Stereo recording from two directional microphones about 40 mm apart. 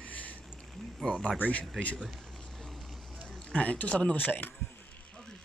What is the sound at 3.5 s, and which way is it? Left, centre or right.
Speech, left.